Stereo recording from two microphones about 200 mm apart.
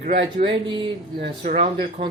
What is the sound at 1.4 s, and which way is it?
Speech, 35° right (ahead or behind).